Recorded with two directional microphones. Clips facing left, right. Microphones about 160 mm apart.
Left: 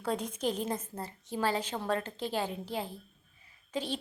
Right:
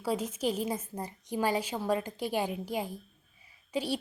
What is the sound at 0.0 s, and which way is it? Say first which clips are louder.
A woman's voice: right 2 dB; 5° right (ahead or behind).